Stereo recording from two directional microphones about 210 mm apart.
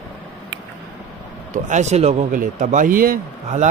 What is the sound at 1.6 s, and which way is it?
Speech, 35° right (ahead or behind).